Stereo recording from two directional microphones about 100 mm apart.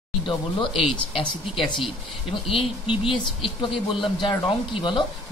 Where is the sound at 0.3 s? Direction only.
55° left (ahead or behind).